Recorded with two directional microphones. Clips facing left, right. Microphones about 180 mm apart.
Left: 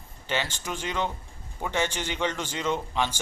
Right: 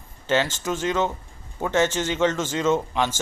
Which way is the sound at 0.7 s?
15° left (ahead or behind).